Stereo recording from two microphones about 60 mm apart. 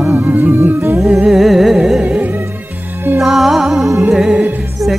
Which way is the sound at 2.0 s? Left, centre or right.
Right.